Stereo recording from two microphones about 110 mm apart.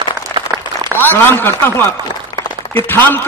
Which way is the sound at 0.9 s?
15° left (ahead or behind).